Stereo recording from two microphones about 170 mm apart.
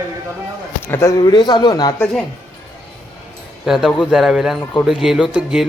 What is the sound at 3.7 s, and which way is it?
Speech, centre (ahead or behind).